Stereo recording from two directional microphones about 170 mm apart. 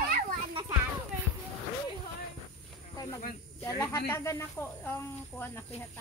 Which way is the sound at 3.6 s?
20° left (ahead or behind).